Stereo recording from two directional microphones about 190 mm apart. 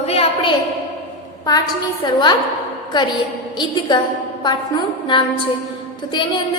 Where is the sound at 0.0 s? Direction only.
30° left (ahead or behind).